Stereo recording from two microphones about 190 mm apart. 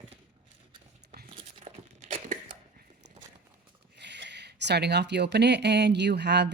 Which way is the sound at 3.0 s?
65° right (ahead or behind).